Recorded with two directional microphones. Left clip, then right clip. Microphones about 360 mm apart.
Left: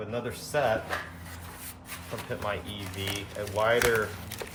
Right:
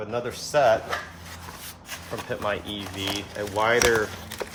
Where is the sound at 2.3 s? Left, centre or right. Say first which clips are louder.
Right 5 dB; right.